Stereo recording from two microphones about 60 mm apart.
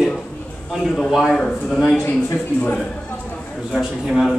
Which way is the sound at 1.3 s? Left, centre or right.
Centre.